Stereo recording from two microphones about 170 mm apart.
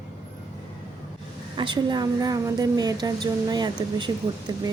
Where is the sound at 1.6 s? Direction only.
25° right (ahead or behind).